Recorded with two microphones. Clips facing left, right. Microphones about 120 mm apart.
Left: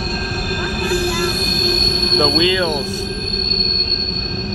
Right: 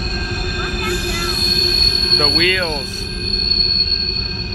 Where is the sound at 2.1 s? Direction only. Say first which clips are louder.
Left 3 dB; 20° left (ahead or behind).